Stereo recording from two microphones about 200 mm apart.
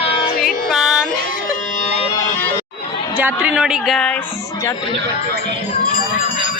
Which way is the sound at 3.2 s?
10° right (ahead or behind).